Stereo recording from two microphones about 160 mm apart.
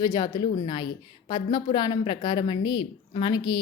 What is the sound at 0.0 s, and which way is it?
A woman's voice, 25° left (ahead or behind).